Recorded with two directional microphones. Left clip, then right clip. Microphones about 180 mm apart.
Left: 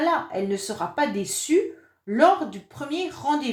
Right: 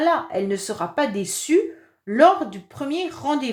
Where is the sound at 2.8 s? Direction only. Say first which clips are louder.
Right 3 dB; 40° right (ahead or behind).